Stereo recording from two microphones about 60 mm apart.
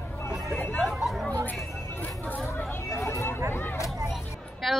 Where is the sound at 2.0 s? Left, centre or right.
Left.